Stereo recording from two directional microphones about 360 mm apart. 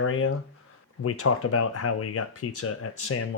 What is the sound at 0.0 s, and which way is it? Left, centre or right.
Speech, left.